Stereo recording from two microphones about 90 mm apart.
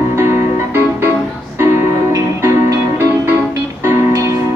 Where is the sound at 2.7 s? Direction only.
30° right (ahead or behind).